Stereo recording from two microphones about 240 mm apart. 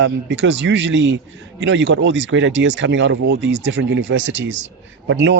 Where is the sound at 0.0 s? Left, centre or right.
Right.